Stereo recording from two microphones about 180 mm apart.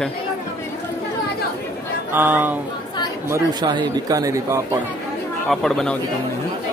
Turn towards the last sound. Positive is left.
turn(degrees=5)  # may be behind; listen again after turning